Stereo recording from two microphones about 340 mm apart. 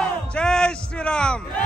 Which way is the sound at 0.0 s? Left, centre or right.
Centre.